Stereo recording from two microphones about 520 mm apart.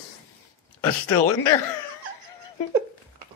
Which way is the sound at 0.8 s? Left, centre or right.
Left.